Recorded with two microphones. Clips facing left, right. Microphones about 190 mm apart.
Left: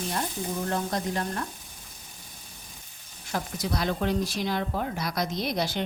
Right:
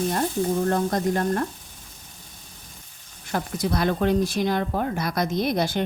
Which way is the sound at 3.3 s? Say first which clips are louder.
Right 5 dB; 55° right (ahead or behind).